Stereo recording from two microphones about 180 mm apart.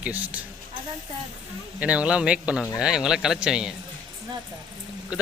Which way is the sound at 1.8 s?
5° right (ahead or behind).